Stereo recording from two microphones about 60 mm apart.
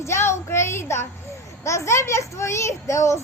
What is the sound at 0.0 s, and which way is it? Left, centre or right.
Child singing, left.